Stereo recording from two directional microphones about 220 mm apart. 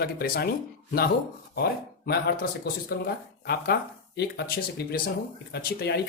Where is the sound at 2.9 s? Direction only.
45° left (ahead or behind).